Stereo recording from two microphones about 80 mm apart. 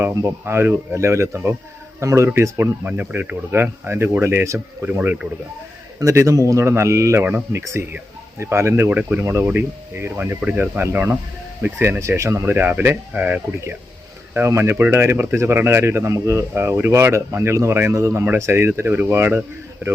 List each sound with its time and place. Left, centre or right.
0.0 s speech: right
2.8 s speech: centre; by 4.6 s right
4.8 s speech: right
6.0 s speech: right
8.9 s speech: centre